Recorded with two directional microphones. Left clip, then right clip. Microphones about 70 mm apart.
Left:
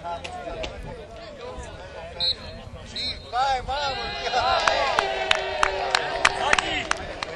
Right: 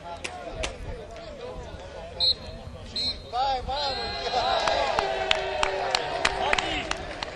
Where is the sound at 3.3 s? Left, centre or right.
Left.